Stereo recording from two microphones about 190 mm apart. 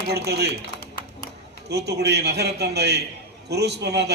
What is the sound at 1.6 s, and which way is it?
A man's voice, 60° right (ahead or behind).